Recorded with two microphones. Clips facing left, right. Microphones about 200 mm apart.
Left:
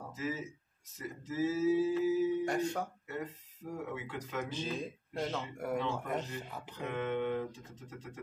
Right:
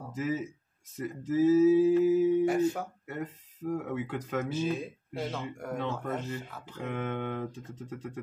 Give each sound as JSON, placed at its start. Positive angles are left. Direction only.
{"t": 0.1, "sound": "speech", "side_deg": -55}
{"t": 2.4, "sound": "speech", "side_deg": -5}
{"t": 3.1, "sound": "speech", "side_deg": -55}
{"t": 4.5, "sound": "speech", "side_deg": -5}
{"t": 5.6, "sound": "speech", "side_deg": 5}
{"t": 6.5, "sound": "speech", "side_deg": 15}
{"t": 6.9, "sound": "speech", "side_deg": -55}